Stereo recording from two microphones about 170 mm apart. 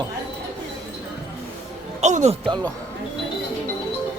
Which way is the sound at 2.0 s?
40° right (ahead or behind).